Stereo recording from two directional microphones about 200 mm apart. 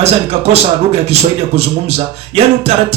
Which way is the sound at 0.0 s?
30° right (ahead or behind).